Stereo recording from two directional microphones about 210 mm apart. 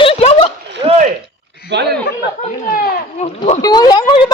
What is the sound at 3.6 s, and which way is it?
Speech, 20° left (ahead or behind).